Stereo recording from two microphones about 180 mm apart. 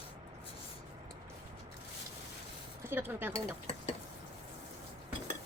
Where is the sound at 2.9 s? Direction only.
10° right (ahead or behind).